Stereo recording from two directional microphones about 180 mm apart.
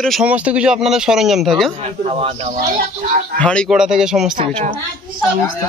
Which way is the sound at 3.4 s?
5° left (ahead or behind).